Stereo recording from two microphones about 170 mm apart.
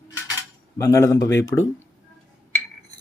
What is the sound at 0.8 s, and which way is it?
Speech, 20° left (ahead or behind).